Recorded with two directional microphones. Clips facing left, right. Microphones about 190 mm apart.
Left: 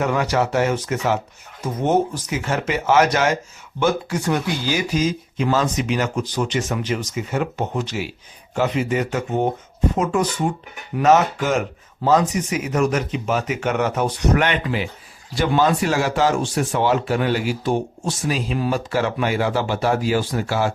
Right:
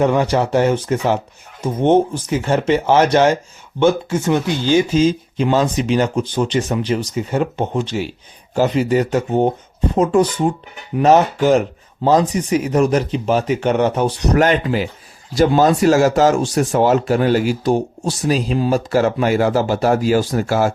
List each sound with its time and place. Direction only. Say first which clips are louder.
0.0 s speech: right 5 dB; 30° right (ahead or behind); by 20.7 s 45° right (ahead or behind)